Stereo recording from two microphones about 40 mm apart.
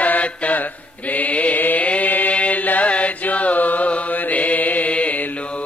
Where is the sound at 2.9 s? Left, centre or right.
Left.